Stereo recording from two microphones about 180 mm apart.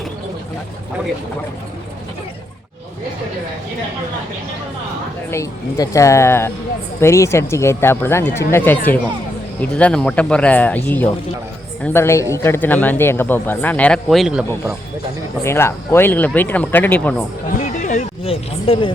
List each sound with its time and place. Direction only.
5.3 s a man's voice: 20° left (ahead or behind); by 14.8 s 5° right (ahead or behind)
15.4 s a man's voice: 15° left (ahead or behind)
17.6 s a sound: 45° left (ahead or behind)